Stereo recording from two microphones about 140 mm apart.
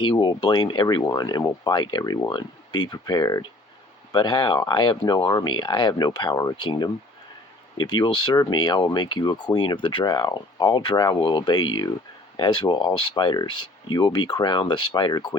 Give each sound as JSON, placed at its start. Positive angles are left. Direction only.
{"t": 0.0, "sound": "speech", "side_deg": 35}